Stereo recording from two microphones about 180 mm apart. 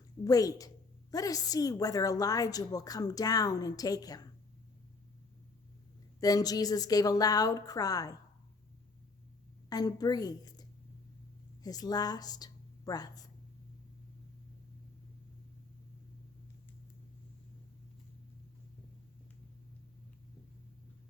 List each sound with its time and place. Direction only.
0.3 s a woman's voice: 20° left (ahead or behind)
6.1 s a woman's voice: 20° left (ahead or behind)
9.6 s a woman's voice: 20° left (ahead or behind)